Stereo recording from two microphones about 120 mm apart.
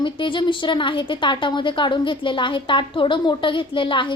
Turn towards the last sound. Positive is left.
turn(degrees=45)  # may be behind; listen again after turning